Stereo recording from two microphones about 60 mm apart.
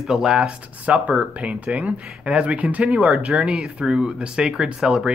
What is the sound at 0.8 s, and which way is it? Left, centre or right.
Speech, right.